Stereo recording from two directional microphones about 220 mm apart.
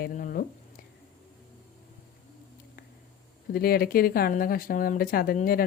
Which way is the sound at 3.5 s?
45° left (ahead or behind).